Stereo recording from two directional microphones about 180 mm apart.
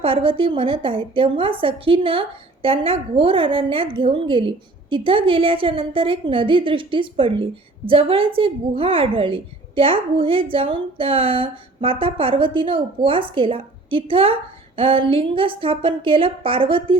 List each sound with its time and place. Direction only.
0.0 s a woman's voice: 30° right (ahead or behind)